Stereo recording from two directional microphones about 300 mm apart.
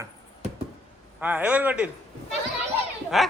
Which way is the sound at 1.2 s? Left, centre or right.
Centre.